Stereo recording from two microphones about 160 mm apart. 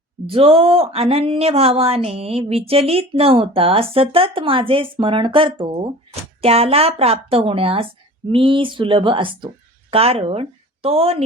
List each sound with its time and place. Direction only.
0.3 s speech: 35° right (ahead or behind)